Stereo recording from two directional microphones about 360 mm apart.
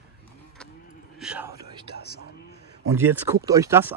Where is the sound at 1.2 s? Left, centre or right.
Centre.